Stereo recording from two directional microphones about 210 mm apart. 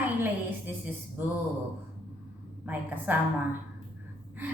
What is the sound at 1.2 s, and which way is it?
Speech, 10° right (ahead or behind).